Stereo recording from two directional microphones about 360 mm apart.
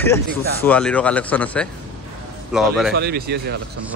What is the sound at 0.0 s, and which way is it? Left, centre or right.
Speech, centre.